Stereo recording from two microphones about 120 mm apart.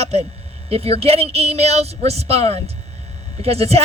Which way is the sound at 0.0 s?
60° right (ahead or behind).